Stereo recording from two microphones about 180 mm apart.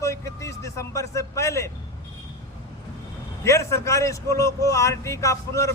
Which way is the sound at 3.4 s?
15° left (ahead or behind).